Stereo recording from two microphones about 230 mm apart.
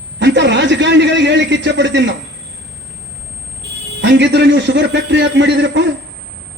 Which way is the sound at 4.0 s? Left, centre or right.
Right.